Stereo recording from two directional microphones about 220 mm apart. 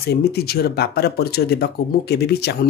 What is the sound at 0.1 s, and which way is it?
Speech, 45° left (ahead or behind).